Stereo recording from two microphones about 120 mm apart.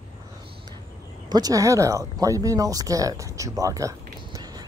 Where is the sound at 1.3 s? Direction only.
30° right (ahead or behind).